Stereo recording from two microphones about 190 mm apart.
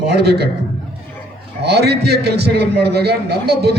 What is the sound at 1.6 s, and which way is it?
A man's voice, 60° right (ahead or behind).